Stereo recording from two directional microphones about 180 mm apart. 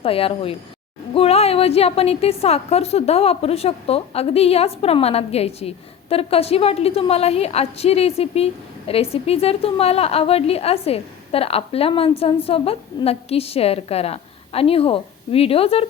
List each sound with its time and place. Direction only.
0.0 s a woman's voice: 30° left (ahead or behind)